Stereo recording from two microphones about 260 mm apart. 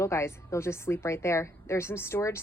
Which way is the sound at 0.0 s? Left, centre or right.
Centre.